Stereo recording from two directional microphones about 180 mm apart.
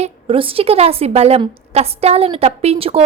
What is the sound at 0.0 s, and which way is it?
A woman's voice, 30° right (ahead or behind).